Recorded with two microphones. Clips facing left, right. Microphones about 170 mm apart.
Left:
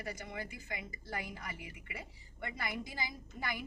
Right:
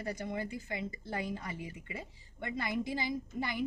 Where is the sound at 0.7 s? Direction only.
25° right (ahead or behind).